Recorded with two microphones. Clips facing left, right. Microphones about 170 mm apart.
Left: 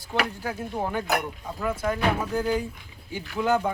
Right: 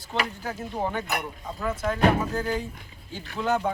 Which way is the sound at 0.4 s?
5° left (ahead or behind).